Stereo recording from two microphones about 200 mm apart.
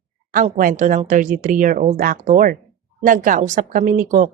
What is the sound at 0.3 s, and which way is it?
A woman's voice, 40° right (ahead or behind).